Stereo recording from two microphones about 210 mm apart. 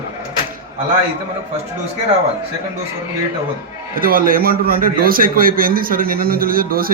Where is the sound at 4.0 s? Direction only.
45° right (ahead or behind).